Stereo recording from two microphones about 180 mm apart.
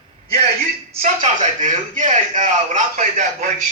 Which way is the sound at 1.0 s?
40° right (ahead or behind).